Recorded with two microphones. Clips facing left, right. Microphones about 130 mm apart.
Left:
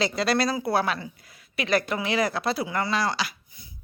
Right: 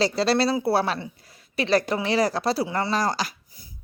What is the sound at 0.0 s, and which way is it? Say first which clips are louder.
Speech: right 3 dB; 30° right (ahead or behind).